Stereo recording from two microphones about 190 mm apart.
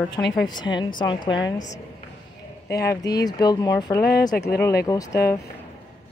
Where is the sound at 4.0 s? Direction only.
55° left (ahead or behind).